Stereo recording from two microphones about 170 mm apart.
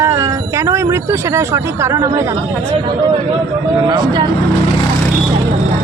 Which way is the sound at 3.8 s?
25° right (ahead or behind).